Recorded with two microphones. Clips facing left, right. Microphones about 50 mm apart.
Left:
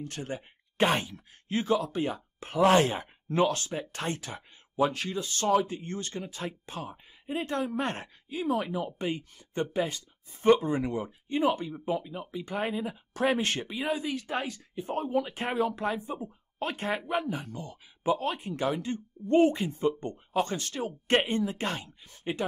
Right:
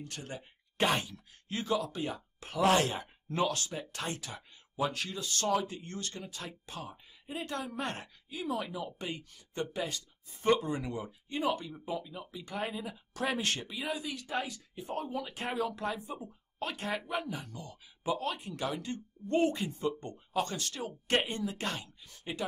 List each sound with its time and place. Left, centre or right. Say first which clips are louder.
0.0 s speech: left 6 dB; left